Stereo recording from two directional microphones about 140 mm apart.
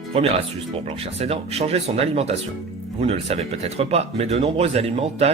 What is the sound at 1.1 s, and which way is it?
Speech, 45° right (ahead or behind).